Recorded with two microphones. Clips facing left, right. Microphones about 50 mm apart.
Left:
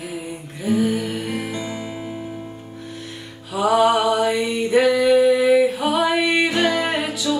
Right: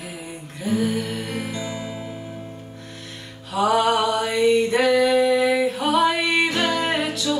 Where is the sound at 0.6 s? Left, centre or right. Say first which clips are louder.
Left 3 dB; centre.